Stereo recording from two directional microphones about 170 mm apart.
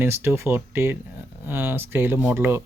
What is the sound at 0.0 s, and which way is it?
Speech, 15° right (ahead or behind).